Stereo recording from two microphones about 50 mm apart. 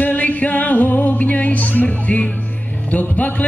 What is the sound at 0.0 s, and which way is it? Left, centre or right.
Music, left.